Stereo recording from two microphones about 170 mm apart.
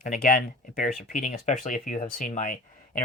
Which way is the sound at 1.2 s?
45° left (ahead or behind).